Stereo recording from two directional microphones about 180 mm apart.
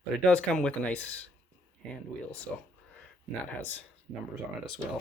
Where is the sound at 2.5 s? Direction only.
5° left (ahead or behind).